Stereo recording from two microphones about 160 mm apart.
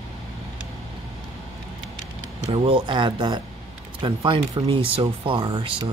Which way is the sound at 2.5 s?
35° right (ahead or behind).